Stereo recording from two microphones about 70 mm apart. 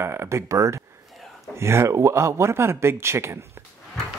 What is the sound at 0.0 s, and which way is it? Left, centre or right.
Speech, right.